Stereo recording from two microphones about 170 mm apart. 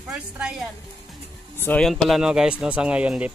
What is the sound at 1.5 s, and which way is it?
Speech, 10° left (ahead or behind).